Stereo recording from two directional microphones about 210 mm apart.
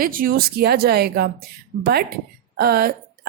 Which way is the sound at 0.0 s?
45° right (ahead or behind).